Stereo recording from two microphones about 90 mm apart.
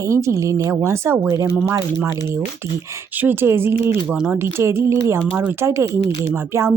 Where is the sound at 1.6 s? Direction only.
30° right (ahead or behind).